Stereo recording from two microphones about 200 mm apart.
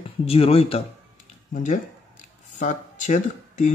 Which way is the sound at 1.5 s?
40° left (ahead or behind).